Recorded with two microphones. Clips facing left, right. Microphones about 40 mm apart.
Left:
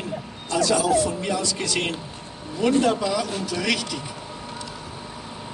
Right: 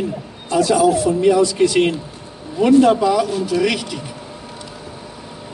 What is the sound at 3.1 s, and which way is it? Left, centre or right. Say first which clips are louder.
Speech: right 8 dB; centre.